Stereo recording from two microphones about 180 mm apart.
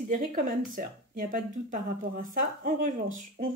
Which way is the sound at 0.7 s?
50° right (ahead or behind).